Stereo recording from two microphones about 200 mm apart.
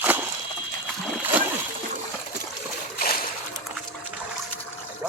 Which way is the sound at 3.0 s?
45° left (ahead or behind).